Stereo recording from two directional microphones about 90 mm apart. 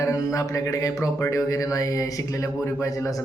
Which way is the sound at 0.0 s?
40° left (ahead or behind).